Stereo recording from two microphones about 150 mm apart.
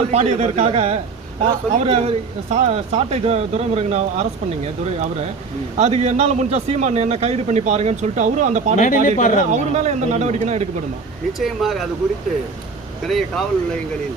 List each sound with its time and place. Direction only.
0.1 s a man's voice: 45° right (ahead or behind)
8.8 s speech: 60° left (ahead or behind)
9.5 s a man's voice: 50° right (ahead or behind)
11.3 s speech: centre (ahead or behind)
13.1 s speech: centre (ahead or behind)